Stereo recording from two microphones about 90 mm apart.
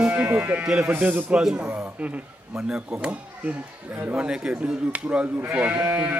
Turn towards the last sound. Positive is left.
turn(degrees=-20)  # may be behind; listen again after turning